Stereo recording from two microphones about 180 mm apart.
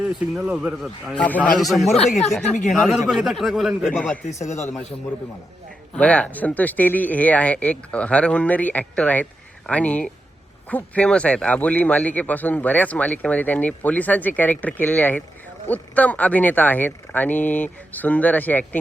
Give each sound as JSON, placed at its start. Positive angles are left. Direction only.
{"t": 0.3, "sound": "a man's voice", "side_deg": -5}
{"t": 2.0, "sound": "speech", "side_deg": 40}
{"t": 2.8, "sound": "a man's voice", "side_deg": 0}
{"t": 5.9, "sound": "a man's voice", "side_deg": 5}